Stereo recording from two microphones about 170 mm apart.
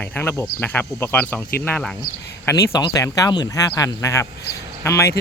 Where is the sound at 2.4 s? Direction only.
20° left (ahead or behind).